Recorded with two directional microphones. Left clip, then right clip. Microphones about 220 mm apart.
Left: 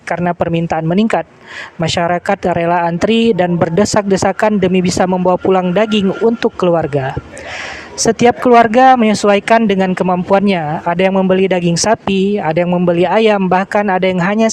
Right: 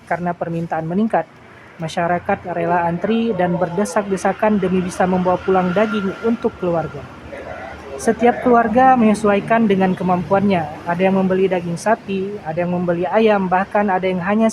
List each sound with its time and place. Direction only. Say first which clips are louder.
0.1 s speech: left 6 dB; 40° left (ahead or behind)
7.9 s speech: left 4 dB; 40° left (ahead or behind)